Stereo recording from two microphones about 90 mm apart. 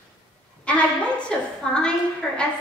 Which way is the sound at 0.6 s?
15° left (ahead or behind).